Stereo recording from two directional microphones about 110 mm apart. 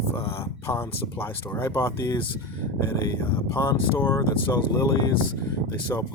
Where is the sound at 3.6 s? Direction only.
20° left (ahead or behind).